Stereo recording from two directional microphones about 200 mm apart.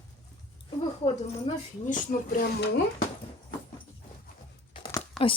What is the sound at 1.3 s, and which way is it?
A woman's voice, 35° left (ahead or behind).